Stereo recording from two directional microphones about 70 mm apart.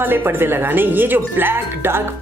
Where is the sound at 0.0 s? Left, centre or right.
Right.